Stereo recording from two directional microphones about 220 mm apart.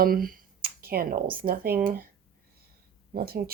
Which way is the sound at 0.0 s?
40° right (ahead or behind).